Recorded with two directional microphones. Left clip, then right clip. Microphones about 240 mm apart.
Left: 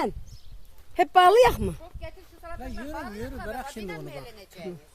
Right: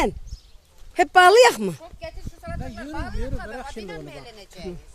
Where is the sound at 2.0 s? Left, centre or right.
Right.